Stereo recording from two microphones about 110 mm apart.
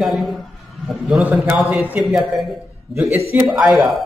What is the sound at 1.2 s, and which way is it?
A man's voice, 15° right (ahead or behind).